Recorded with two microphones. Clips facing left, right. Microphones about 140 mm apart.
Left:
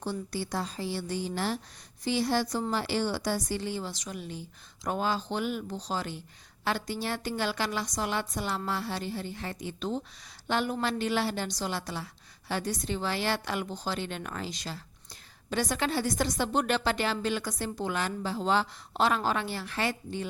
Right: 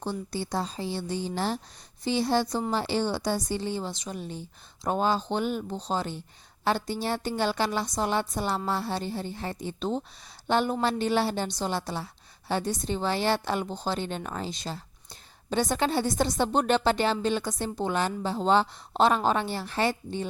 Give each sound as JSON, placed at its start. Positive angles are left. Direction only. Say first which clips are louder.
{"t": 0.0, "sound": "a woman's voice", "louder": "right 2 dB", "side_deg": -25}